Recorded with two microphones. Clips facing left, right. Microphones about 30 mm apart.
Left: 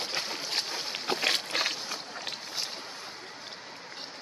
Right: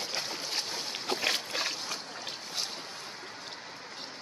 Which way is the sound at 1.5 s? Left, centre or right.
Left.